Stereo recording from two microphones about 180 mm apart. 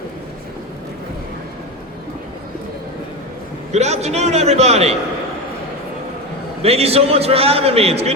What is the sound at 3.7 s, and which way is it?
A man's voice, 35° right (ahead or behind).